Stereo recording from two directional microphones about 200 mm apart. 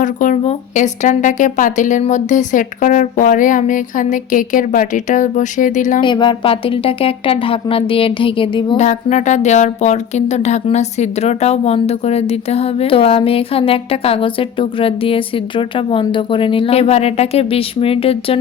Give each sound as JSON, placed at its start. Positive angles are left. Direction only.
{"t": 0.0, "sound": "speech", "side_deg": 40}
{"t": 6.0, "sound": "a woman's voice", "side_deg": 25}
{"t": 8.8, "sound": "speech", "side_deg": 35}